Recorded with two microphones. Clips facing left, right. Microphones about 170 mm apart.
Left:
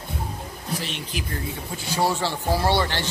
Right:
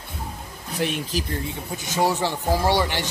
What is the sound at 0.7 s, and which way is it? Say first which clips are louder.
Speech: right 8 dB; 55° right (ahead or behind).